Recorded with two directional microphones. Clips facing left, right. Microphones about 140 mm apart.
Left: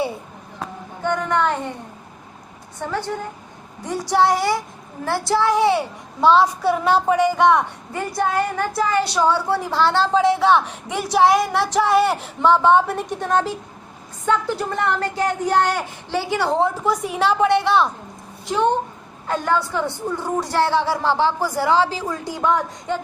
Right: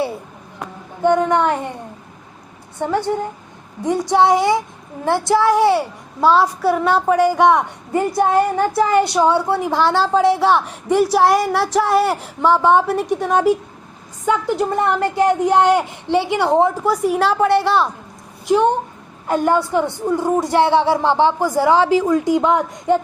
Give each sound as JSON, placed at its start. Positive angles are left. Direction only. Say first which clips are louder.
{"t": 1.0, "sound": "a woman's voice", "louder": "right 6 dB", "side_deg": -20}
{"t": 2.8, "sound": "a woman's voice", "louder": "right 6 dB", "side_deg": -20}
{"t": 7.3, "sound": "a woman's voice", "louder": "right 2 dB", "side_deg": -15}
{"t": 14.3, "sound": "a woman's voice", "louder": "right 3 dB", "side_deg": -15}